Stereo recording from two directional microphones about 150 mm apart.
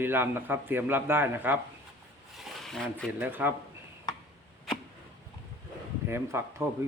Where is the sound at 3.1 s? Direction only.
10° right (ahead or behind).